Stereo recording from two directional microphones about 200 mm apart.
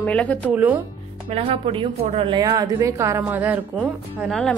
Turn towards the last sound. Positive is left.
turn(degrees=0)  # may be behind; listen again after turning